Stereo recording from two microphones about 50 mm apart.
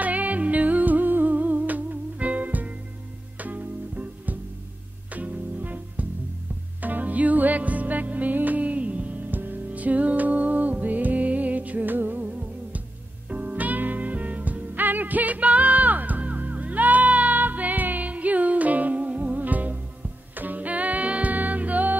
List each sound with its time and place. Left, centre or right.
0.0 s music: right